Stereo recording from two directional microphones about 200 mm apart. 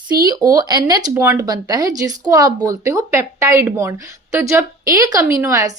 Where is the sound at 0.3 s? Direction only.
20° right (ahead or behind).